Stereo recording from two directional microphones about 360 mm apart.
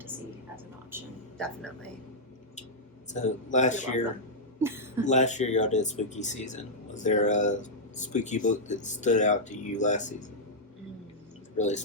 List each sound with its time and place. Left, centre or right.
0.9 s a sound: centre
3.1 s speech: centre
4.6 s speech: centre
5.0 s speech: centre
11.5 s speech: centre